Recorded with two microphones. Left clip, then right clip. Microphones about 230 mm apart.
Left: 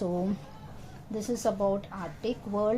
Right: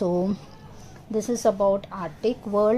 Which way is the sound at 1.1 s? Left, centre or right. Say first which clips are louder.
Right 7 dB; right.